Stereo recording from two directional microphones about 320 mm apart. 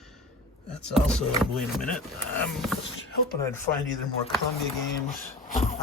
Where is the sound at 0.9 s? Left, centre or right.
Centre.